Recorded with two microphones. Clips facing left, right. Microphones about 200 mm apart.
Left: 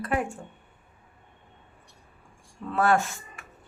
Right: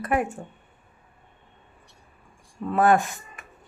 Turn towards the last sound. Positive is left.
turn(degrees=-15)  # may be behind; listen again after turning